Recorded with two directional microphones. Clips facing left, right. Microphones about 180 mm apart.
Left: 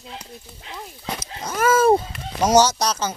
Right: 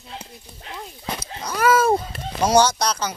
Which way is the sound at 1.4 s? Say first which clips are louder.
Left 1 dB; 25° left (ahead or behind).